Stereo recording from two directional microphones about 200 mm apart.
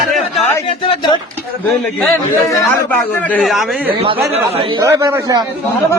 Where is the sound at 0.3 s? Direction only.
30° left (ahead or behind).